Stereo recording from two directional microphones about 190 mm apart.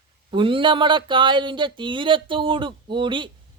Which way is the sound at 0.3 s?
25° right (ahead or behind).